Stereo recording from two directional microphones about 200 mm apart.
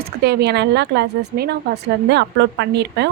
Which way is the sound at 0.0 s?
55° right (ahead or behind).